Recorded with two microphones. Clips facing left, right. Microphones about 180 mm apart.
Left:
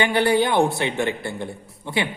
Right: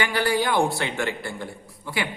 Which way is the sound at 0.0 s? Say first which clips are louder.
Left 5 dB; 25° left (ahead or behind).